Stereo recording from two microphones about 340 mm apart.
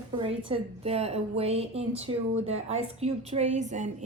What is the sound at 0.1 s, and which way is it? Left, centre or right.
A woman's voice, centre.